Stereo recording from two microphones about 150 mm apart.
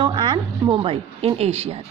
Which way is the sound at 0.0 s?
30° right (ahead or behind).